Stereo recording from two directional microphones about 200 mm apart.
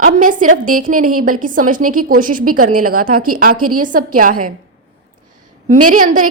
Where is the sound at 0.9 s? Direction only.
90° right.